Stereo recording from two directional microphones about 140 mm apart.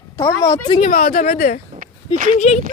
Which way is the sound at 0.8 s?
80° left.